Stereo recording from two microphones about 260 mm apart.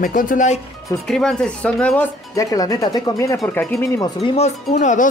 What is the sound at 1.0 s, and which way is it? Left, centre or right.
Speech, centre.